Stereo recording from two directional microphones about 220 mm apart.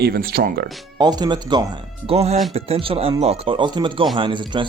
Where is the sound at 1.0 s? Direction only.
20° right (ahead or behind).